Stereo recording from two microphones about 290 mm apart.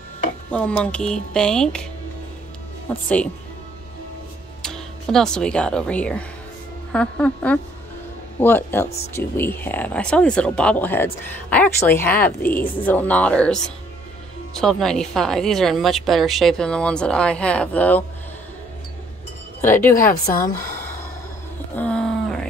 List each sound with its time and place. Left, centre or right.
0.5 s speech: centre
2.9 s speech: centre
4.6 s speech: centre
19.9 s a woman's voice: left
21.7 s a sound: centre